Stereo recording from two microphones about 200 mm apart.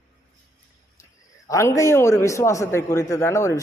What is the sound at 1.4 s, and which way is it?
A man's voice, 15° left (ahead or behind).